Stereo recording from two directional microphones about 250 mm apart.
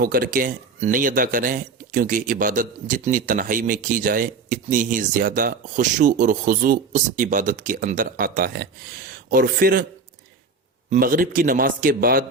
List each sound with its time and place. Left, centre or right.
0.0 s speech: right
10.8 s speech: right